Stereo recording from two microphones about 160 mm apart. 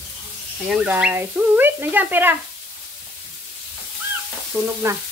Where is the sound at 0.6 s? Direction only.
5° right (ahead or behind).